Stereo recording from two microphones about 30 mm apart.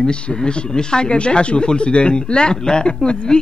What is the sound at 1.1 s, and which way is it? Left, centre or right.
A man's voice, left.